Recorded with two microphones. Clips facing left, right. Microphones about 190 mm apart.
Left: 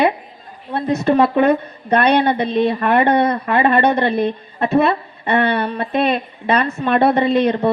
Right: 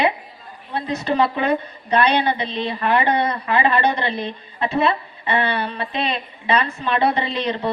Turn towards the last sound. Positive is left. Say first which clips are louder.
# left 8 dB
turn(degrees=50)  # may be behind; listen again after turning